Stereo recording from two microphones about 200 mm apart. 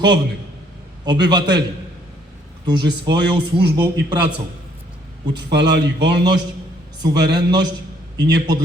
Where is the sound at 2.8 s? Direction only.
60° right (ahead or behind).